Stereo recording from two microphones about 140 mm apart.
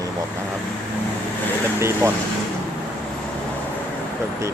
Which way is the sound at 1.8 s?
20° right (ahead or behind).